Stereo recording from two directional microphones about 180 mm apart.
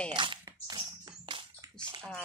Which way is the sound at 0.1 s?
25° right (ahead or behind).